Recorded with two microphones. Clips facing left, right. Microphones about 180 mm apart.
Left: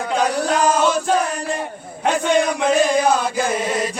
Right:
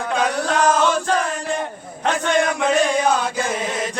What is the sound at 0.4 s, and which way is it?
Chant, 10° left (ahead or behind).